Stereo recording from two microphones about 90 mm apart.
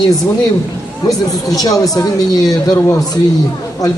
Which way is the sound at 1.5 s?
45° left (ahead or behind).